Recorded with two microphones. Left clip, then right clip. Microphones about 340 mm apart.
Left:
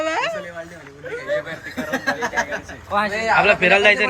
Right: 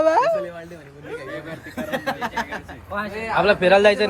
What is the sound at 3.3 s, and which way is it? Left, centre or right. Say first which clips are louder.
Speech: left 1 dB; centre.